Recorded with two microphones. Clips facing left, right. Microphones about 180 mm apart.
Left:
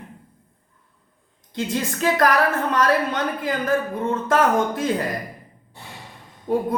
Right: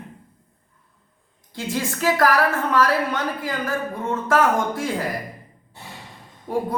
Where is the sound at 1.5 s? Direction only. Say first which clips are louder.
Left 1 dB; 20° left (ahead or behind).